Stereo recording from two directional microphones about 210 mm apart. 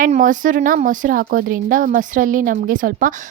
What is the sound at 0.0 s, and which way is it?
A woman's voice, 40° right (ahead or behind).